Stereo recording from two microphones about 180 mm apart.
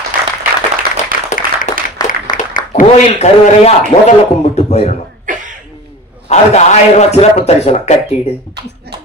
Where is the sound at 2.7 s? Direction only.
35° left (ahead or behind).